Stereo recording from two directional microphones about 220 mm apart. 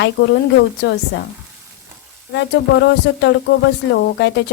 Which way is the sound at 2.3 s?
55° left (ahead or behind).